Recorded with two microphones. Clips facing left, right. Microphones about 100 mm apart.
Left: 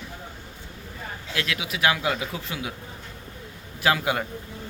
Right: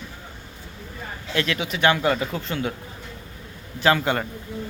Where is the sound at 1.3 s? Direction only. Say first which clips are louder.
Right 5 dB; centre (ahead or behind).